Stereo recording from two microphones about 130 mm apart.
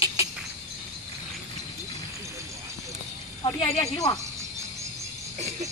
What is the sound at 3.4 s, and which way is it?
Speech, 50° left (ahead or behind).